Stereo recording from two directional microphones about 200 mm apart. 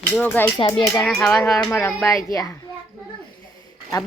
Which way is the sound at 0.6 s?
25° left (ahead or behind).